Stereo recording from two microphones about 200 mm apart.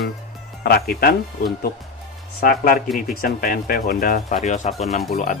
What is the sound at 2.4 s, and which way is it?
Speech, 45° left (ahead or behind).